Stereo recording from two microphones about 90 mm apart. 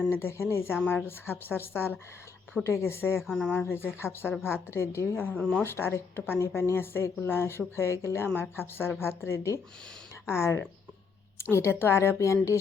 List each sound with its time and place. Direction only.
0.1 s speech: 25° left (ahead or behind)
3.3 s speech: 10° left (ahead or behind)
3.6 s speech: 25° left (ahead or behind)
5.3 s speech: 10° left (ahead or behind)
5.6 s a woman's voice: 25° left (ahead or behind)